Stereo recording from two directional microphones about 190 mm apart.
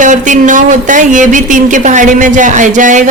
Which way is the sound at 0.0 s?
40° right (ahead or behind).